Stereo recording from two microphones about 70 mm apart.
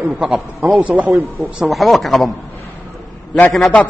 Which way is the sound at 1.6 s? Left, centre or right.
Centre.